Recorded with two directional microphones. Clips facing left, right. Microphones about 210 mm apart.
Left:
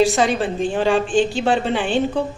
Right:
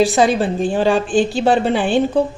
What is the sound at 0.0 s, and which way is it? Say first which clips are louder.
A woman's voice: right 3 dB; 35° right (ahead or behind).